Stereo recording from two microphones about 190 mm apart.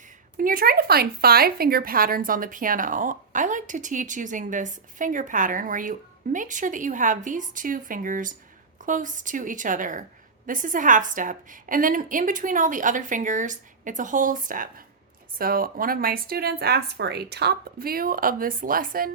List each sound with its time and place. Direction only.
0.3 s a woman's voice: 45° right (ahead or behind)